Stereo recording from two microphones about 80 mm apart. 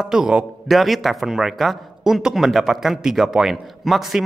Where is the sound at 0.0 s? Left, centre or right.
Centre.